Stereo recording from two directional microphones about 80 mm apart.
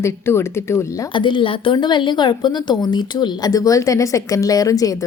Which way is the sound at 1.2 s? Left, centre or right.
Left.